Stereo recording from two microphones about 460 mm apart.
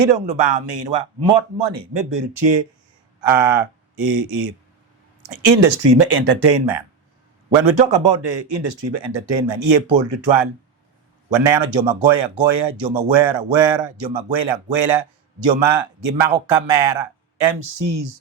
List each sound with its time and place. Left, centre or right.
0.0 s speech: right
3.2 s speech: right
5.3 s speech: right
7.5 s speech: right
7.9 s speech: right
11.3 s speech: right
15.4 s speech: right